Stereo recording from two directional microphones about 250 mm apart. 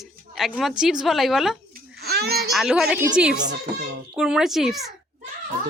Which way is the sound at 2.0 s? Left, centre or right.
Right.